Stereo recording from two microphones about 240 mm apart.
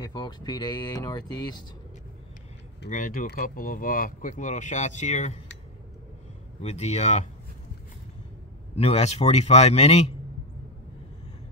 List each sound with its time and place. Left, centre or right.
0.0 s speech: centre
2.9 s speech: left
6.6 s a man's voice: left
8.7 s a man's voice: left